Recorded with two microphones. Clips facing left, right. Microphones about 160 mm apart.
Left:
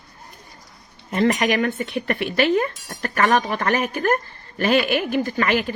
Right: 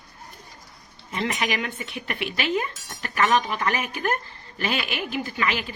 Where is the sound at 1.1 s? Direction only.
45° left (ahead or behind).